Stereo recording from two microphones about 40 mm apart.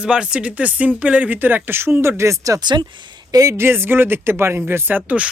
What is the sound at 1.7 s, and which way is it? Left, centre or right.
Speech, right.